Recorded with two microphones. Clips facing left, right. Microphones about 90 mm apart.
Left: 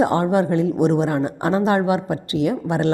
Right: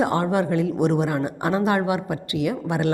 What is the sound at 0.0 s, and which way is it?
A woman's voice, 25° left (ahead or behind).